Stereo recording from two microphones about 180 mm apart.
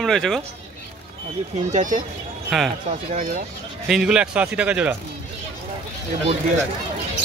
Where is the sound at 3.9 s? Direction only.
5° right (ahead or behind).